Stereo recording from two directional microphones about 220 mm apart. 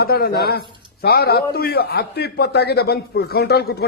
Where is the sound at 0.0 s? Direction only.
45° left (ahead or behind).